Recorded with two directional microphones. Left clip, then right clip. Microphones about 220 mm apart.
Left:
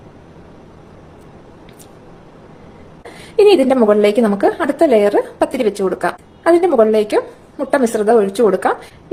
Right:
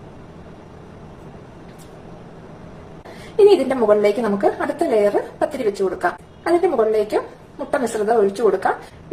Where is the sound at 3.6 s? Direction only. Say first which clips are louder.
Left 4 dB; 45° left (ahead or behind).